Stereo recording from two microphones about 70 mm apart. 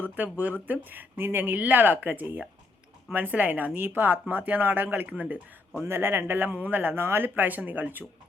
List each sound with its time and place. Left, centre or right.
0.0 s speech: right
5.8 s speech: right